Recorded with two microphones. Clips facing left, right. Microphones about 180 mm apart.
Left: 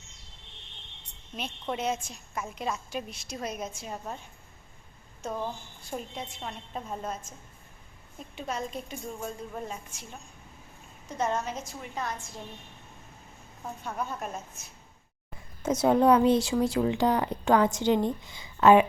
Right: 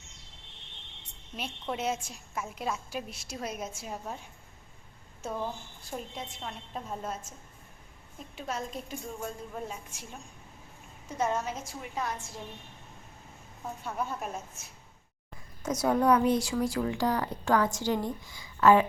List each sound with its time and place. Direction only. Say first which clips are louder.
1.6 s a woman's voice: left 1 dB; 5° right (ahead or behind)
5.2 s a woman's voice: left 1 dB; centre (ahead or behind)
8.4 s a woman's voice: left 2 dB; centre (ahead or behind)
11.2 s a woman's voice: left 1 dB; 5° right (ahead or behind)
13.8 s a woman's voice: even; 5° right (ahead or behind)
15.6 s speech: left 4 dB; 25° left (ahead or behind)